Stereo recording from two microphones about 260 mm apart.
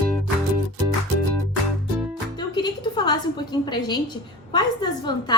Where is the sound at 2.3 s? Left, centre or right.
Centre.